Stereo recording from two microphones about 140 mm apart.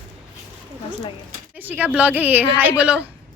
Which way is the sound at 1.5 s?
15° right (ahead or behind).